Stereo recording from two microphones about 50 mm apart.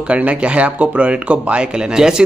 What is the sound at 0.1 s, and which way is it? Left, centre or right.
A man's voice, right.